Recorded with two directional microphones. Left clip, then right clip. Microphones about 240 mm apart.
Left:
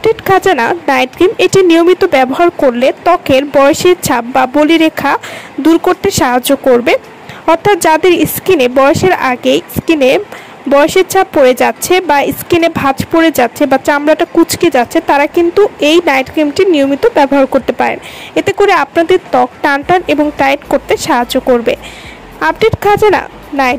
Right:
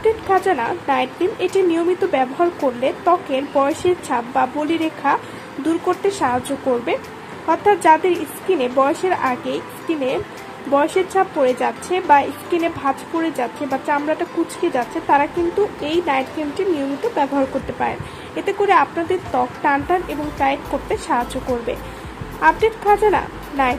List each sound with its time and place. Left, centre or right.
0.3 s speech: left
7.4 s speech: left